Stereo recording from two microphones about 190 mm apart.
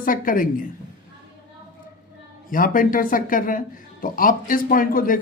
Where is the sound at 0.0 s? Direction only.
45° left (ahead or behind).